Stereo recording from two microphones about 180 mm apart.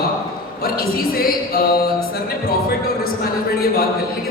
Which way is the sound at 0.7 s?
55° left (ahead or behind).